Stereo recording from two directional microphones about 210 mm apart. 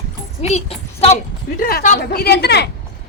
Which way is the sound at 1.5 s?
45° left (ahead or behind).